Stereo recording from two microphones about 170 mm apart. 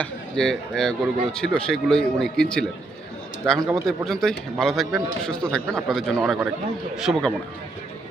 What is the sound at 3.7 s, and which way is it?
A man's voice, 5° left (ahead or behind).